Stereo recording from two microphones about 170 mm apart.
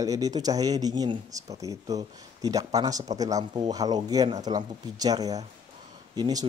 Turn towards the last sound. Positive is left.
turn(degrees=-25)  # may be behind; listen again after turning